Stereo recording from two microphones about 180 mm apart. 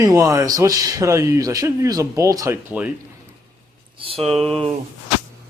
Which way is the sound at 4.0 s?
30° right (ahead or behind).